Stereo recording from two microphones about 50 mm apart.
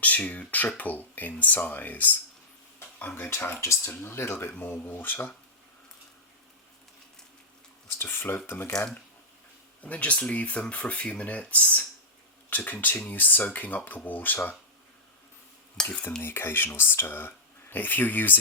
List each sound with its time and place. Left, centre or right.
0.0 s speech: left
3.0 s speech: left
3.6 s speech: left
3.9 s speech: left
4.5 s speech: left
8.0 s speech: left
9.8 s speech: left
15.8 s cutlery: centre
16.2 s speech: left